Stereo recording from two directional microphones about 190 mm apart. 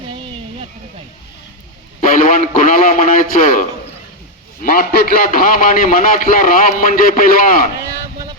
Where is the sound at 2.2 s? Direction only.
45° left (ahead or behind).